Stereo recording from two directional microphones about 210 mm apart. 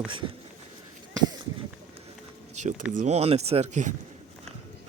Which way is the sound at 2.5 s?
35° right (ahead or behind).